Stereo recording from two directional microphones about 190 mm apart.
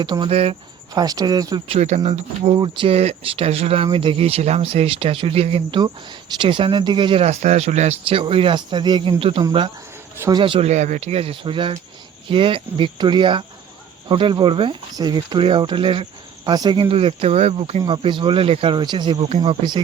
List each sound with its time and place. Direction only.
0.0 s speech: 25° right (ahead or behind)
0.9 s speech: 20° right (ahead or behind)
1.6 s speech: 35° right (ahead or behind)